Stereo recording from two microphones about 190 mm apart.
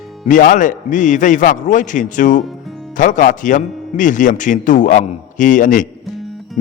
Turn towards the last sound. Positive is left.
turn(degrees=45)  # may be behind; listen again after turning